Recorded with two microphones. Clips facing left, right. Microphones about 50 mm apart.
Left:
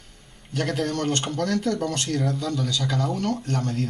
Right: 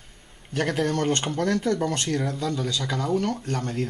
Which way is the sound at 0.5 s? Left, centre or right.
Centre.